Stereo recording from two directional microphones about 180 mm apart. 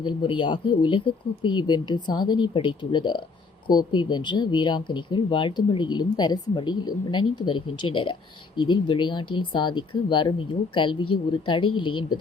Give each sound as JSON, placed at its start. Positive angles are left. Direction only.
{"t": 0.0, "sound": "speech", "side_deg": 25}